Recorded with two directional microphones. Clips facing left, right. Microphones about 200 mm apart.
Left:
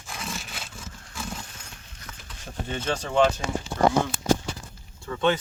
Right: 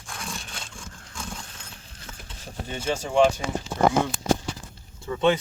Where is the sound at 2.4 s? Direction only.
10° right (ahead or behind).